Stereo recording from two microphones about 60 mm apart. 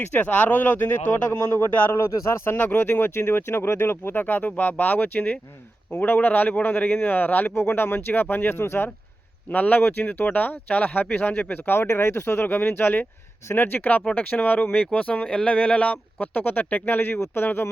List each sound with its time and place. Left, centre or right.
0.0 s speech: left
9.5 s speech: left
16.1 s speech: left